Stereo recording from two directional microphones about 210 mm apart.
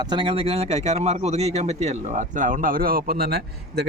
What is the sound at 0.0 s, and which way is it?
Speech, 20° right (ahead or behind).